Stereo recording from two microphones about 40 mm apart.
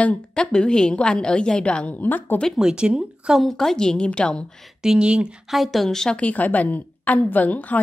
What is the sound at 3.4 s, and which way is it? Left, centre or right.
A woman's voice, centre.